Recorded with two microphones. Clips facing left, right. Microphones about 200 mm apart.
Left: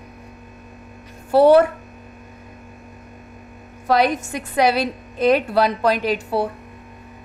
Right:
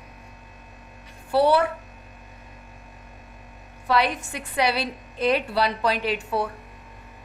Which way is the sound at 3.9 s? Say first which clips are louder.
Left 5 dB; 45° left (ahead or behind).